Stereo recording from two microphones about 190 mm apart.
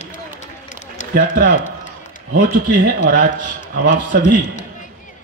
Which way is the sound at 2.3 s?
45° right (ahead or behind).